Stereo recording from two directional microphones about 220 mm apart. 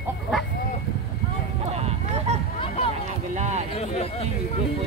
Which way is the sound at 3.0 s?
30° right (ahead or behind).